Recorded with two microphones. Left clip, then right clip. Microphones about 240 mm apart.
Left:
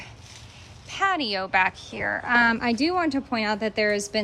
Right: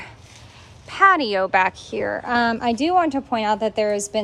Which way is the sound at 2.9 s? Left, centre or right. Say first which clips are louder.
Right 6 dB; centre.